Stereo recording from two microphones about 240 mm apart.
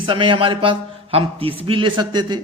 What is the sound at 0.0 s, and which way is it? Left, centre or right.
A man's voice, right.